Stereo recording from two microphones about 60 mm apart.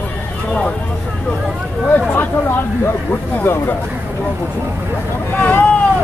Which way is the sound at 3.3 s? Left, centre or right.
Left.